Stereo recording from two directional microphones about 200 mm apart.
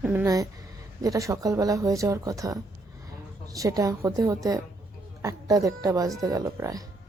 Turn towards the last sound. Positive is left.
turn(degrees=-15)  # may be behind; listen again after turning